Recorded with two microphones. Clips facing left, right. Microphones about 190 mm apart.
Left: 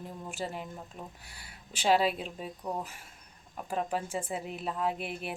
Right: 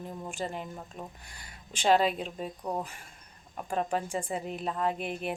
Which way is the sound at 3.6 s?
5° left (ahead or behind).